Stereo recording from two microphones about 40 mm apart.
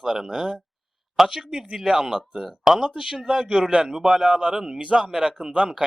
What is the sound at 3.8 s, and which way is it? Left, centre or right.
Speech, centre.